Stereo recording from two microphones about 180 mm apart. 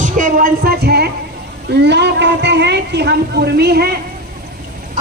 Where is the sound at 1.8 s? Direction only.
75° right (ahead or behind).